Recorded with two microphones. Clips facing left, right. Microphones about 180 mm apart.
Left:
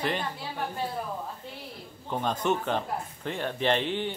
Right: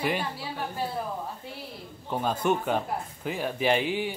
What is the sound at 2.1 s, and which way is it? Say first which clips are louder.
Speech: right 1 dB; 5° right (ahead or behind).